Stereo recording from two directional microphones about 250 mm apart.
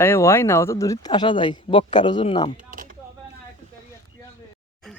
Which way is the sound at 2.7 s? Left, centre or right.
Right.